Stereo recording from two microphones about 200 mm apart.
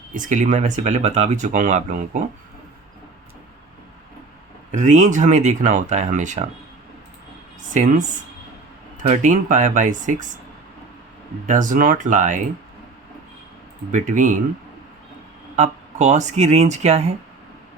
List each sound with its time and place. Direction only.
0.1 s speech: 40° right (ahead or behind)
4.7 s speech: 35° right (ahead or behind)
7.7 s speech: 40° right (ahead or behind)
9.0 s speech: 40° right (ahead or behind)
11.4 s speech: 40° right (ahead or behind)
13.9 s speech: 40° right (ahead or behind)
15.5 s speech: 35° right (ahead or behind)